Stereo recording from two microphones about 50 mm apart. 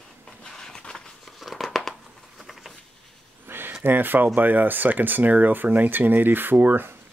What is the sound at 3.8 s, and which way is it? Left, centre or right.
Speech, right.